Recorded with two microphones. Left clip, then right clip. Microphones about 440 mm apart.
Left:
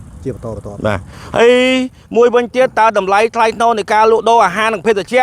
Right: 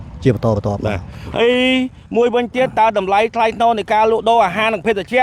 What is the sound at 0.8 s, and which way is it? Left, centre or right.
Speech, left.